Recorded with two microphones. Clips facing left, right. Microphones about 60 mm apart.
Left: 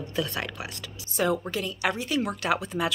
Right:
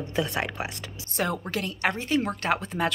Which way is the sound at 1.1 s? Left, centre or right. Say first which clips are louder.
Left 2 dB; right.